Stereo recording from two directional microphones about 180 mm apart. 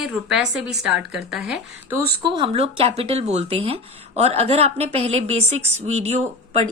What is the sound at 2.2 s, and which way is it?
Speech, 30° right (ahead or behind).